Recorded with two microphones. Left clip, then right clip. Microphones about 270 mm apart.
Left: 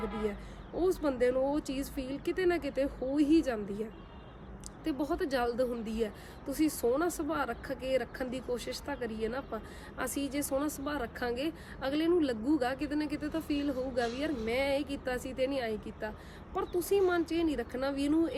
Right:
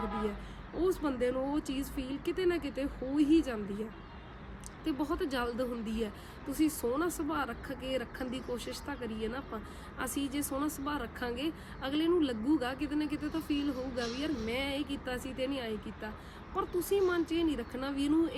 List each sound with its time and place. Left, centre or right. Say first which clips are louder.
0.0 s a sound: even; centre
0.8 s a woman's voice: left 2 dB; centre
4.9 s a woman's voice: left 2 dB; centre